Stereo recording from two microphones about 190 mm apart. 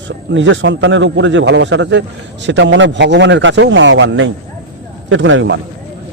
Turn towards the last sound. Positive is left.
turn(degrees=-75)  # may be behind; listen again after turning